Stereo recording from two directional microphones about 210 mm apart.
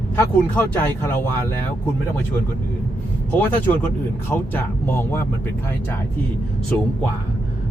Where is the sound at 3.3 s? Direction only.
10° left (ahead or behind).